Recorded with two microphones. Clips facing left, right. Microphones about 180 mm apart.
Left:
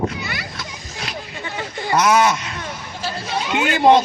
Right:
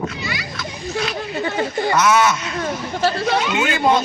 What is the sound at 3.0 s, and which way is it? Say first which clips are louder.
Speech: right 7 dB; 70° right (ahead or behind).